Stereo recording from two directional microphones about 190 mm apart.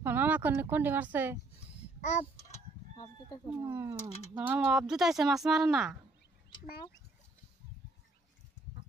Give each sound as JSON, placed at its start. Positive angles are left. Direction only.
{"t": 0.0, "sound": "speech", "side_deg": -10}
{"t": 3.0, "sound": "speech", "side_deg": 20}
{"t": 3.5, "sound": "speech", "side_deg": -10}